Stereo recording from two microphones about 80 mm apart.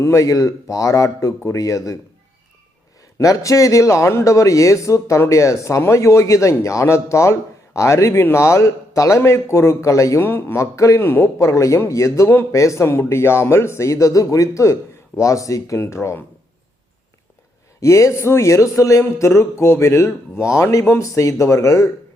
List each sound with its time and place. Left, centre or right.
0.0 s a man's voice: left
3.2 s a man's voice: left
10.2 s a man's voice: left
11.3 s a man's voice: left
17.7 s a man's voice: left